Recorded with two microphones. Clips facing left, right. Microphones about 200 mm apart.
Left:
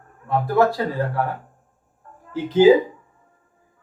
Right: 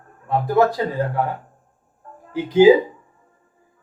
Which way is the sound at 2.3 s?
10° right (ahead or behind).